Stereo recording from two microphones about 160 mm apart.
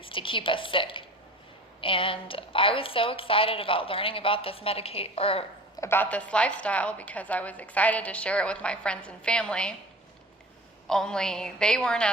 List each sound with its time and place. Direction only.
0.0 s a woman's voice: 35° left (ahead or behind)
5.8 s a woman's voice: 15° left (ahead or behind)
10.8 s a woman's voice: 5° left (ahead or behind)